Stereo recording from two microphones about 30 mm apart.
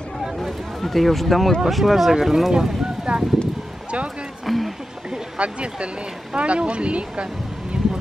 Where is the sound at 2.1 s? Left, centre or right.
Centre.